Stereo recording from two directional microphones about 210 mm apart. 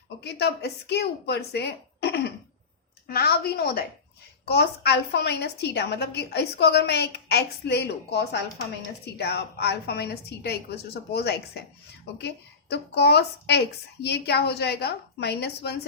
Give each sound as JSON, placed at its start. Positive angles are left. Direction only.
{"t": 0.2, "sound": "a woman's voice", "side_deg": 50}